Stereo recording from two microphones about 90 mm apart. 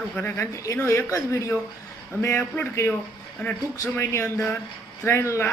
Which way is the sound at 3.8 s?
30° left (ahead or behind).